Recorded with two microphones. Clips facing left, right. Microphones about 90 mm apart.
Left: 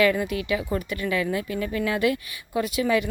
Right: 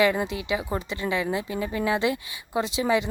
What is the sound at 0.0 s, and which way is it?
Speech, 20° right (ahead or behind).